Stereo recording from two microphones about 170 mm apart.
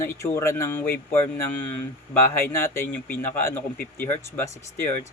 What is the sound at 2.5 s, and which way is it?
A man's voice, 15° left (ahead or behind).